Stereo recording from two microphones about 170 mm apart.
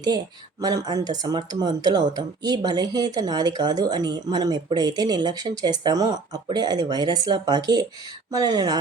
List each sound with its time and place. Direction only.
0.6 s speech: 25° right (ahead or behind)